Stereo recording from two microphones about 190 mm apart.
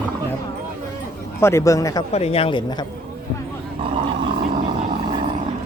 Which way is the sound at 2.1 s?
30° left (ahead or behind).